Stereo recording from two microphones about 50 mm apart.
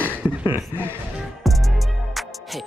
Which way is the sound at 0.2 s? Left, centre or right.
Right.